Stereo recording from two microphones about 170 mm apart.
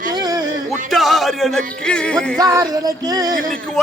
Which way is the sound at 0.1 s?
25° right (ahead or behind).